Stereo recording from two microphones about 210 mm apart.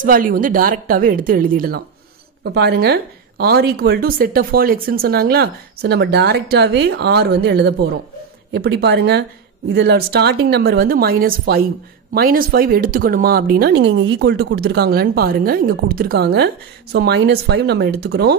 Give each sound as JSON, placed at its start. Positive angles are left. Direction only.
{"t": 0.0, "sound": "a woman's voice", "side_deg": -40}